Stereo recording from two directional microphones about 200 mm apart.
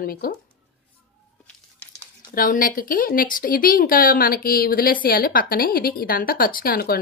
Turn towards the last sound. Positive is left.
turn(degrees=50)  # may be behind; listen again after turning